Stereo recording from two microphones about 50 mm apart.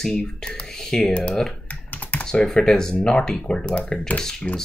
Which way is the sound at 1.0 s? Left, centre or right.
Left.